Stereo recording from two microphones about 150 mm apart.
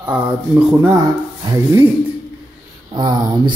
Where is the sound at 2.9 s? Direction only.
30° right (ahead or behind).